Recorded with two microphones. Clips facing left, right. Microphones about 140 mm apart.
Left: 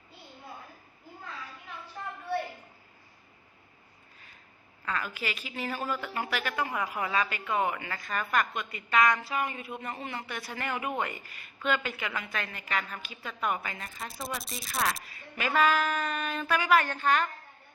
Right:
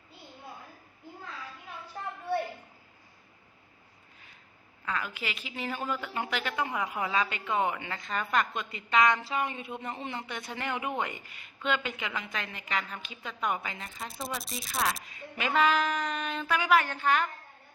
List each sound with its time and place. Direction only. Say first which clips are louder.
4.9 s speech: left 1 dB; 15° right (ahead or behind)
13.9 s speech: right 1 dB; centre (ahead or behind)
15.0 s a woman's voice: even; 20° right (ahead or behind)